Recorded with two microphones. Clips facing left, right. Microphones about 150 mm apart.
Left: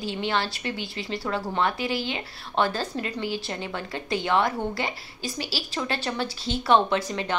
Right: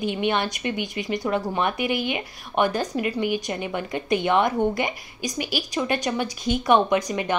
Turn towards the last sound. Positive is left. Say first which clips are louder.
# right 4 dB
turn(degrees=-15)  # may be behind; listen again after turning